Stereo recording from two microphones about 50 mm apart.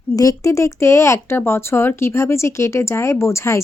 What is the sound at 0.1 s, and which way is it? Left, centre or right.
Speech, left.